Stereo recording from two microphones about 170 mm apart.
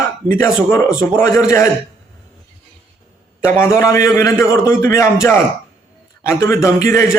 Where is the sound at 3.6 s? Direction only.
15° left (ahead or behind).